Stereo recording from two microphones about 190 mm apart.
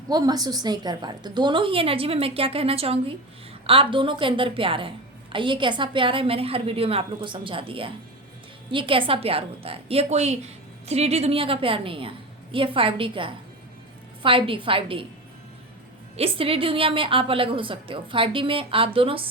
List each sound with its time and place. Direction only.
0.1 s a woman's voice: 20° right (ahead or behind)
16.1 s a woman's voice: 30° right (ahead or behind)